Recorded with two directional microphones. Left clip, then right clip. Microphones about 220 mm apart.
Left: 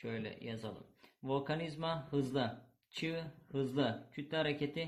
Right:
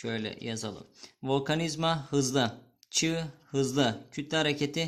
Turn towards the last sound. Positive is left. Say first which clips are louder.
# right 8 dB
turn(degrees=-40)  # may be behind; listen again after turning